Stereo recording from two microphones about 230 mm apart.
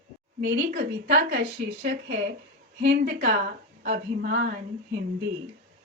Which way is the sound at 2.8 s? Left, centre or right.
Right.